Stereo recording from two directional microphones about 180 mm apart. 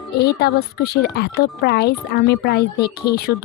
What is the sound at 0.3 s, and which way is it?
Speech, 60° left (ahead or behind).